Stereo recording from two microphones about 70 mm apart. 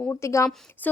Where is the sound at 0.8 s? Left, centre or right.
Left.